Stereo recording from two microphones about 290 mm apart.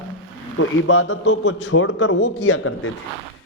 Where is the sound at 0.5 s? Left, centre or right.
Left.